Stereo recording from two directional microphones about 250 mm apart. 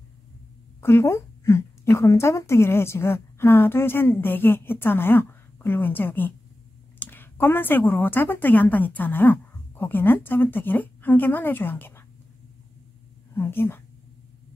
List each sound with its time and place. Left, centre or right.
0.7 s a woman's voice: centre
13.3 s speech: centre